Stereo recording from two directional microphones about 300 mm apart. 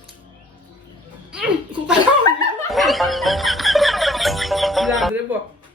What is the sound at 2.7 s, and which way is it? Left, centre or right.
Music, centre.